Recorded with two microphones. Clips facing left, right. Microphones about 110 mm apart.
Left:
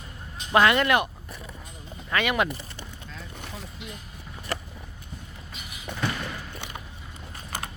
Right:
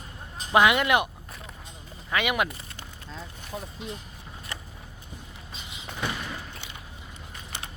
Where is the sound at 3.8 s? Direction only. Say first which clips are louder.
Right 3 dB; 35° right (ahead or behind).